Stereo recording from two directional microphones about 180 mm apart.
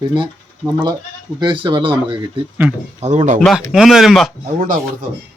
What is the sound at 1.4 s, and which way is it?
Speech, 25° right (ahead or behind).